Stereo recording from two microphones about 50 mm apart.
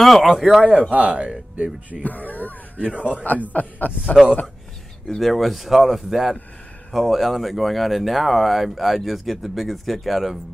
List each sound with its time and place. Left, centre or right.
0.0 s speech: centre
0.7 s speech: right
2.0 s speech: left
2.8 s speech: right
3.5 s a man's voice: left
5.0 s speech: centre